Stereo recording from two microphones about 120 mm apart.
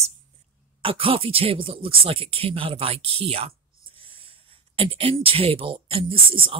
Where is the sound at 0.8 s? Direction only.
50° right (ahead or behind).